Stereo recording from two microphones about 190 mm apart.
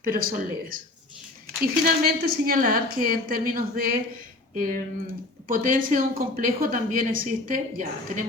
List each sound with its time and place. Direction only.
0.0 s speech: 50° right (ahead or behind)